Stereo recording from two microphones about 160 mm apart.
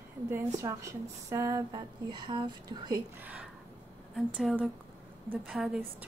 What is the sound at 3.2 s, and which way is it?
A woman's voice, 10° right (ahead or behind).